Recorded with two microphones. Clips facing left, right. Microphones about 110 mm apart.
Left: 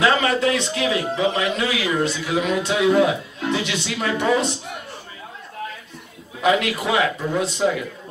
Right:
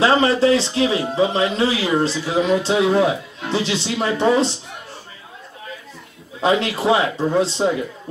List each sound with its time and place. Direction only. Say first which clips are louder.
0.0 s speech: right 3 dB; 30° right (ahead or behind)
6.4 s speech: right 2 dB; 30° right (ahead or behind)